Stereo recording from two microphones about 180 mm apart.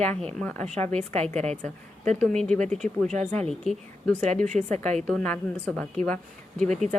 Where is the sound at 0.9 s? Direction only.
35° right (ahead or behind).